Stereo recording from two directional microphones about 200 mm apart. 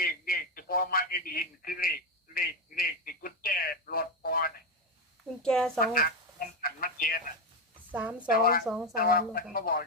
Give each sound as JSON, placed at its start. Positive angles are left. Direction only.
{"t": 0.0, "sound": "radio", "side_deg": 45}
{"t": 5.4, "sound": "speech", "side_deg": 5}
{"t": 5.8, "sound": "speech", "side_deg": 45}
{"t": 6.6, "sound": "a sound", "side_deg": 45}
{"t": 7.9, "sound": "a woman's voice", "side_deg": -5}
{"t": 8.3, "sound": "speech", "side_deg": 45}
{"t": 8.6, "sound": "speech", "side_deg": 0}
{"t": 9.0, "sound": "speech", "side_deg": 45}